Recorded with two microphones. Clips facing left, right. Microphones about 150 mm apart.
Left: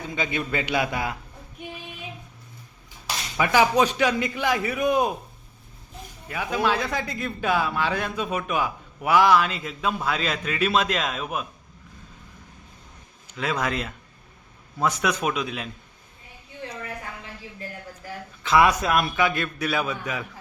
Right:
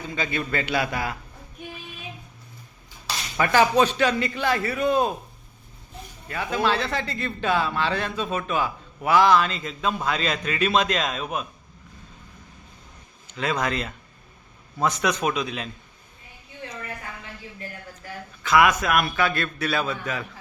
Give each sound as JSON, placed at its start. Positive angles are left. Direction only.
{"t": 0.1, "sound": "speech", "side_deg": 15}
{"t": 3.3, "sound": "speech", "side_deg": 10}
{"t": 6.2, "sound": "speech", "side_deg": 10}
{"t": 13.3, "sound": "a man's voice", "side_deg": 5}
{"t": 18.4, "sound": "speech", "side_deg": 30}
{"t": 19.0, "sound": "speech", "side_deg": 15}